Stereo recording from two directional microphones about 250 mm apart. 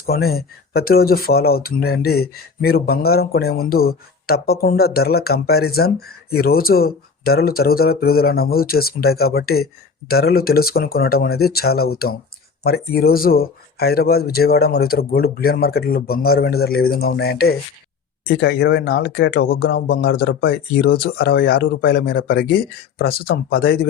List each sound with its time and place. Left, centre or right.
0.0 s speech: left